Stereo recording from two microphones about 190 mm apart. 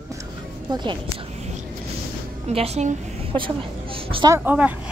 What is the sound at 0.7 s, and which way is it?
Speech, 25° right (ahead or behind).